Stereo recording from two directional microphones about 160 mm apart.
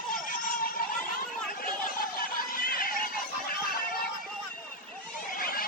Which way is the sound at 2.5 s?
65° left (ahead or behind).